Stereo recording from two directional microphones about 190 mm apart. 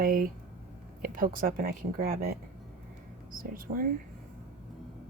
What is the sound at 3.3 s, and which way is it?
Speech, 45° right (ahead or behind).